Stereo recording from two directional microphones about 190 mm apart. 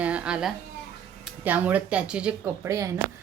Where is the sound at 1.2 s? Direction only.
10° right (ahead or behind).